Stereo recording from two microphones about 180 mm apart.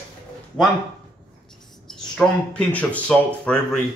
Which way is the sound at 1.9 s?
5° left (ahead or behind).